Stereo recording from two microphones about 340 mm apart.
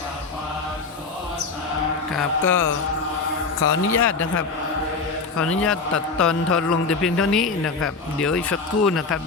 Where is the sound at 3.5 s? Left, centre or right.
Left.